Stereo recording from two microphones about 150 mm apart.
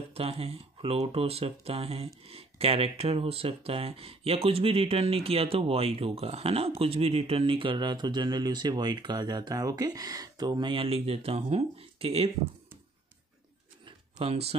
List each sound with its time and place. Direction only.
0.1 s speech: 40° right (ahead or behind)
14.1 s speech: 40° right (ahead or behind)